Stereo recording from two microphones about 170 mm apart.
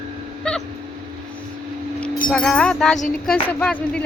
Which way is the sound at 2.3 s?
5° left (ahead or behind).